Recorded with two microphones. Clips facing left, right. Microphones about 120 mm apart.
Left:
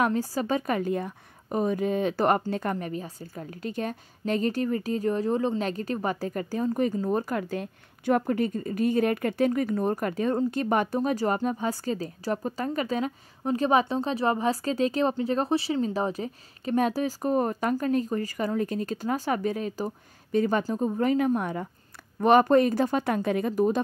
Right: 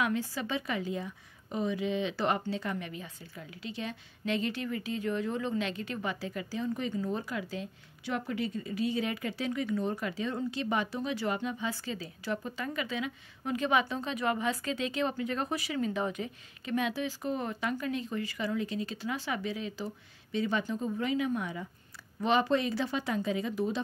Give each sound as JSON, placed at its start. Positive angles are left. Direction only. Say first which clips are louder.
{"t": 0.0, "sound": "a woman's voice", "louder": "left 6 dB", "side_deg": 40}